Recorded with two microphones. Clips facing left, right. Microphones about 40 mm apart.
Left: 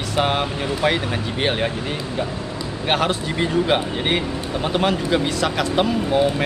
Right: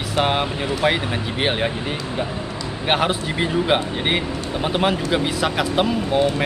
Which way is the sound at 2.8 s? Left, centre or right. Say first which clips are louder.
Right 1 dB; centre.